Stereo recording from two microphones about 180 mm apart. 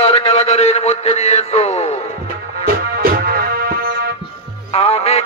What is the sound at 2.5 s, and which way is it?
Music, 55° right (ahead or behind).